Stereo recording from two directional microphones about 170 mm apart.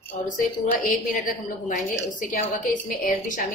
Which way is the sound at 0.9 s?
50° left (ahead or behind).